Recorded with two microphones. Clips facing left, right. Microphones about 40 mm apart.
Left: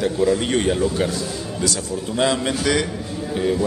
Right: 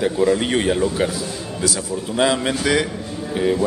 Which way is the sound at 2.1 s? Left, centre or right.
Centre.